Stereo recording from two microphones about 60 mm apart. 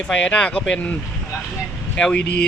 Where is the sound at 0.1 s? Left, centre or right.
Centre.